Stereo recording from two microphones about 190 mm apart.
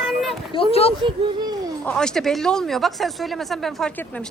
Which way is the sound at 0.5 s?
30° left (ahead or behind).